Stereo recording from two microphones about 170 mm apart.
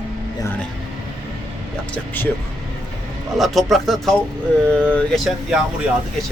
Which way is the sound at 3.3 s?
Centre (ahead or behind).